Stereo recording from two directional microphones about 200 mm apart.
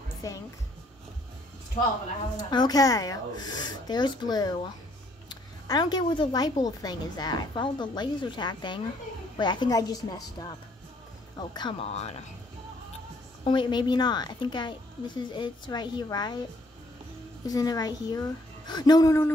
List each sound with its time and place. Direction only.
0.2 s speech: 15° left (ahead or behind)
1.8 s speech: 30° left (ahead or behind)
2.5 s a woman's voice: 20° left (ahead or behind)
11.3 s a woman's voice: 20° left (ahead or behind)
13.4 s a woman's voice: 25° left (ahead or behind)
17.5 s a woman's voice: 20° left (ahead or behind)